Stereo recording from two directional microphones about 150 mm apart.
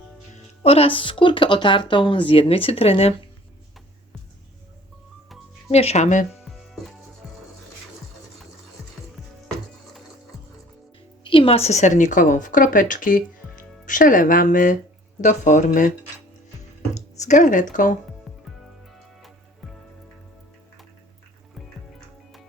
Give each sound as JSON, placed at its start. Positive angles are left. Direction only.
{"t": 0.3, "sound": "speech", "side_deg": 40}
{"t": 5.7, "sound": "speech", "side_deg": 45}
{"t": 11.2, "sound": "a woman's voice", "side_deg": 35}
{"t": 16.9, "sound": "speech", "side_deg": 50}